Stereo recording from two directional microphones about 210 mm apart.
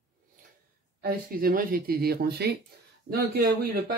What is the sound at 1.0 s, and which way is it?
Speech, 45° right (ahead or behind).